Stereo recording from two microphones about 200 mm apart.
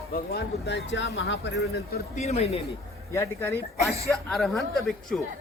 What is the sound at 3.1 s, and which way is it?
Speech, 15° left (ahead or behind).